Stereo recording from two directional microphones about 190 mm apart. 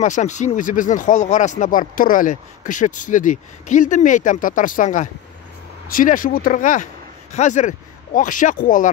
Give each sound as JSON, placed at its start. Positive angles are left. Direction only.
{"t": 0.0, "sound": "speech", "side_deg": 40}